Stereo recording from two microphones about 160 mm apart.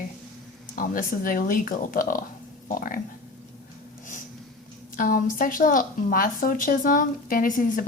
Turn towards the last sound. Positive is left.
turn(degrees=55)  # may be behind; listen again after turning